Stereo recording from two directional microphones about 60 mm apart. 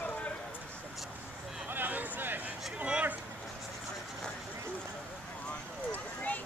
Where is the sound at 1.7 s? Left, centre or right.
Right.